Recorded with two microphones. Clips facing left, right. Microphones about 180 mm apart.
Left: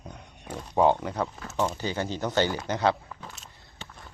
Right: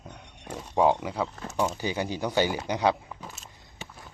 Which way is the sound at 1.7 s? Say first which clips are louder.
Even; 15° right (ahead or behind).